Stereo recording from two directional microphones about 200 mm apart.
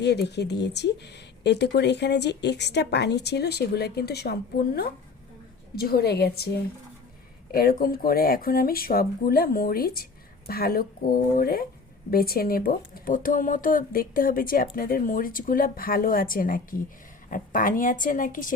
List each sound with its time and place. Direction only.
0.0 s speech: 55° left (ahead or behind)
7.5 s speech: 50° left (ahead or behind)